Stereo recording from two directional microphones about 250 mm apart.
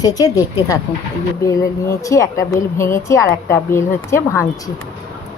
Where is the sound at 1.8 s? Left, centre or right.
Centre.